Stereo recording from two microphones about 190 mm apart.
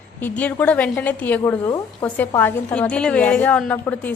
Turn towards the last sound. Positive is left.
turn(degrees=10)  # may be behind; listen again after turning